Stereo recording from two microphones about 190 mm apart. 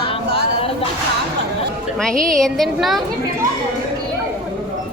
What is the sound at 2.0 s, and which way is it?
A woman's voice, 5° left (ahead or behind).